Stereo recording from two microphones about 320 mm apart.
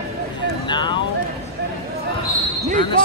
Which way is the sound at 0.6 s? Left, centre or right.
Centre.